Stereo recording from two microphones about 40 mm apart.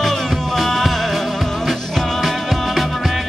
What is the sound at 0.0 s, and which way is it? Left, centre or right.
Music, centre.